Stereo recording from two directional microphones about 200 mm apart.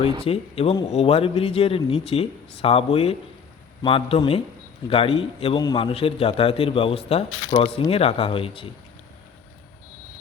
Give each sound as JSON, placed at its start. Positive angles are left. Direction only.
{"t": 0.3, "sound": "a man's voice", "side_deg": 30}